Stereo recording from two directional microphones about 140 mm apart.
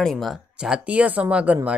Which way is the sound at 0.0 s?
Centre (ahead or behind).